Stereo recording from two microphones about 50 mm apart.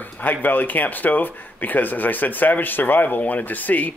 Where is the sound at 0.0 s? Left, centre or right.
Left.